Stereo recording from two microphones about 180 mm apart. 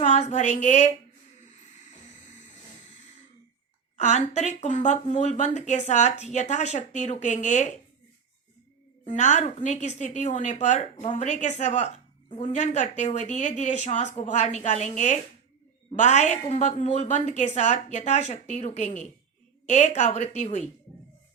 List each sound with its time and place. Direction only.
0.0 s speech: 40° left (ahead or behind)
1.9 s music: 40° left (ahead or behind)
3.9 s a woman's voice: 40° left (ahead or behind)
9.0 s a woman's voice: 40° left (ahead or behind)